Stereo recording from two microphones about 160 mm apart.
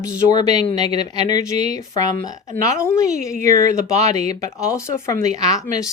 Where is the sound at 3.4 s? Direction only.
50° right (ahead or behind).